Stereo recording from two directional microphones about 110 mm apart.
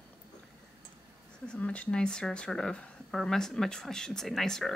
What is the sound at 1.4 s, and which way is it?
Speech, 10° left (ahead or behind).